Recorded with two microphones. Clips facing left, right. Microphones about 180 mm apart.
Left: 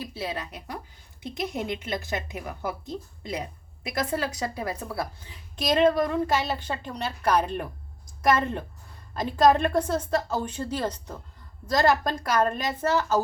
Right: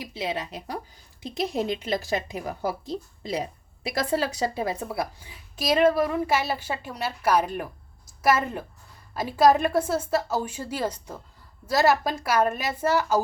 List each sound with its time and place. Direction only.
0.0 s speech: 20° right (ahead or behind)
1.2 s a woman's voice: 30° right (ahead or behind)
5.2 s a woman's voice: 5° right (ahead or behind)